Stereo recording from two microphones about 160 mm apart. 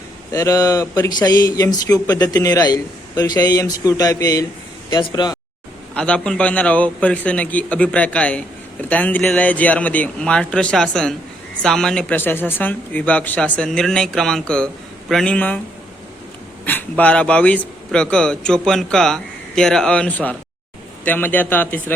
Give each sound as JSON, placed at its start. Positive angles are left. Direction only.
{"t": 0.3, "sound": "a man's voice", "side_deg": 20}
{"t": 5.9, "sound": "a man's voice", "side_deg": 5}
{"t": 16.6, "sound": "a man's voice", "side_deg": 10}